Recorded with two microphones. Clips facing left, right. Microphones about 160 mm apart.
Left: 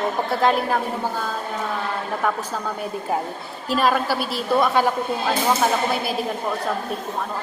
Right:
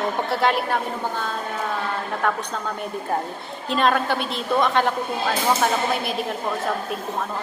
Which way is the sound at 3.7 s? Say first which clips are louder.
Even; 5° left (ahead or behind).